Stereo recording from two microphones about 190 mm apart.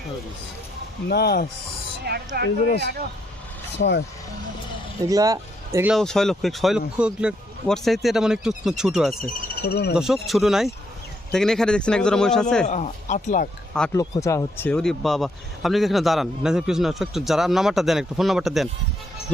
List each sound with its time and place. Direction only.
1.0 s speech: 60° left (ahead or behind)
2.0 s speech: 55° right (ahead or behind)
3.8 s speech: 65° left (ahead or behind)
5.0 s speech: 20° right (ahead or behind)
5.9 s a man's voice: centre (ahead or behind)
9.6 s speech: 55° left (ahead or behind)
9.9 s a man's voice: centre (ahead or behind)
12.6 s speech: 40° left (ahead or behind)
13.9 s a man's voice: 15° left (ahead or behind); by 18.7 s centre (ahead or behind)